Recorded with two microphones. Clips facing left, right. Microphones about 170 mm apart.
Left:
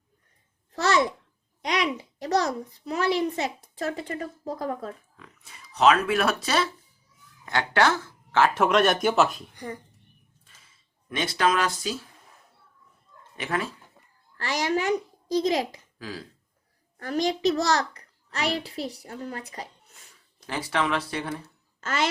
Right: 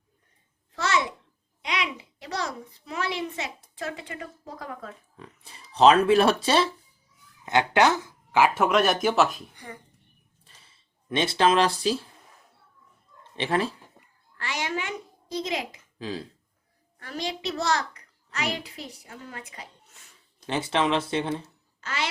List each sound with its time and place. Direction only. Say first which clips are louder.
0.7 s babbling: left 4 dB; 40° left (ahead or behind)
1.6 s a child's voice: left 4 dB; 40° left (ahead or behind)
5.1 s speech: right 4 dB; 30° right (ahead or behind); by 8.5 s 15° right (ahead or behind)
8.5 s speech: left 1 dB; centre (ahead or behind)
11.1 s speech: right 3 dB; 25° right (ahead or behind)
13.3 s speech: right 4 dB; 30° right (ahead or behind)
14.3 s a child's voice: left 5 dB; 40° left (ahead or behind)
16.0 s speech: right 4 dB; 25° right (ahead or behind)
17.0 s a child's voice: left 8 dB; 45° left (ahead or behind)
20.5 s speech: right 2 dB; 25° right (ahead or behind)
21.8 s speech: left 5 dB; 45° left (ahead or behind)